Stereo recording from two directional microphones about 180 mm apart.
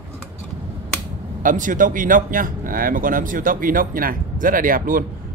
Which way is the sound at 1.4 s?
50° right (ahead or behind).